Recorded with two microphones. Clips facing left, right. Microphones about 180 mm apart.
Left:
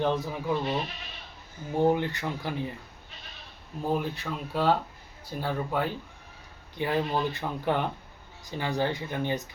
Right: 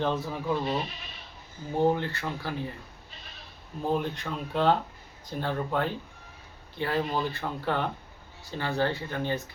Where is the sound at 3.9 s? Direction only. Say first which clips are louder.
Even; 5° left (ahead or behind).